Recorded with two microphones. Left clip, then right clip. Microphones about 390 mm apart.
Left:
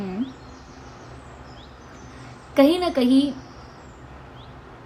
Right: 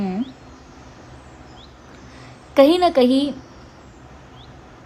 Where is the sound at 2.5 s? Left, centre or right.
Right.